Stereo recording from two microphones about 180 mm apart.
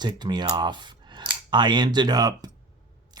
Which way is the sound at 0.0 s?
25° right (ahead or behind).